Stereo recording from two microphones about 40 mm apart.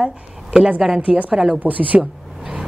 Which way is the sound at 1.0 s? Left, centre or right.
Right.